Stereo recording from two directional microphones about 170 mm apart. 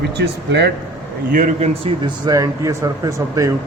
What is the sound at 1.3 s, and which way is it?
Speech, 50° right (ahead or behind).